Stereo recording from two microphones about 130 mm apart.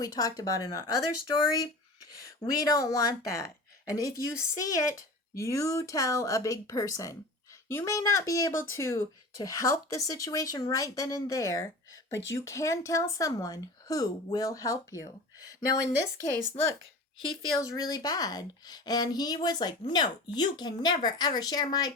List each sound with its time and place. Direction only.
0.0 s speech: 25° left (ahead or behind)
17.6 s speech: 25° left (ahead or behind)